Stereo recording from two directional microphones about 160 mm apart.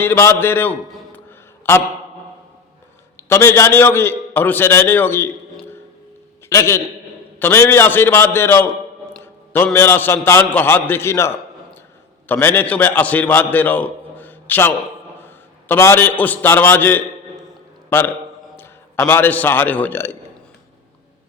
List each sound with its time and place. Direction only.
0.0 s a man's voice: 15° left (ahead or behind)
3.2 s a man's voice: 15° left (ahead or behind)
6.5 s a man's voice: 15° left (ahead or behind)
9.2 s a sound: 15° left (ahead or behind)
9.7 s a man's voice: 15° left (ahead or behind)
12.3 s a man's voice: 15° left (ahead or behind)